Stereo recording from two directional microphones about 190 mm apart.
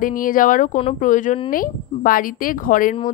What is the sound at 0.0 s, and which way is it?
A woman's voice, 45° left (ahead or behind).